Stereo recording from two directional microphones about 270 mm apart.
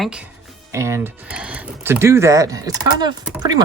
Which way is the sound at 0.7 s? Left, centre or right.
Centre.